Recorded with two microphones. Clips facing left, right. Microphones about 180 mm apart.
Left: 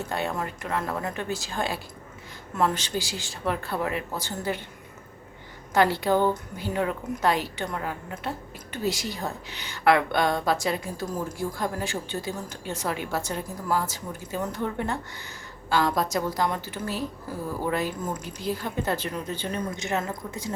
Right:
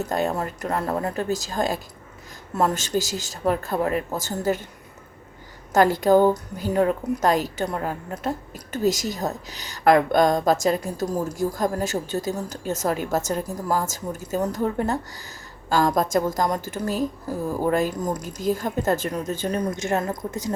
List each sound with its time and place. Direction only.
0.1 s a woman's voice: 40° right (ahead or behind)
5.7 s a woman's voice: 45° right (ahead or behind)